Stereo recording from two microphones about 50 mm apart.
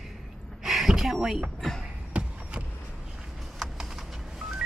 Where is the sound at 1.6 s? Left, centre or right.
Centre.